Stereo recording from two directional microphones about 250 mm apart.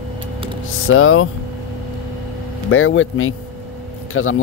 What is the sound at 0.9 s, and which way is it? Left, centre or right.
Speech, left.